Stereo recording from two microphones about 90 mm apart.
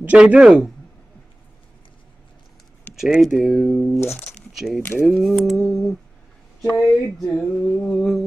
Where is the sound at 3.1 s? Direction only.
5° right (ahead or behind).